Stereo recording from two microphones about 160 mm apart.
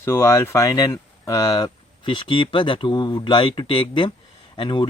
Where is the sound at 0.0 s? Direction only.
15° left (ahead or behind).